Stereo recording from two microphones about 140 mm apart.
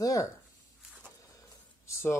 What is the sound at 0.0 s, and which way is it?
Speech, 25° left (ahead or behind).